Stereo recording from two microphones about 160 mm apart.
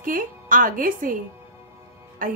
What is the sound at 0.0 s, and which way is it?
A woman's voice, 60° right (ahead or behind).